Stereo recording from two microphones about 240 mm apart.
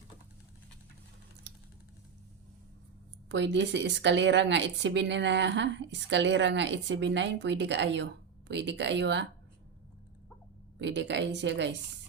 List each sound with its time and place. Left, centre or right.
3.2 s speech: right
10.8 s speech: right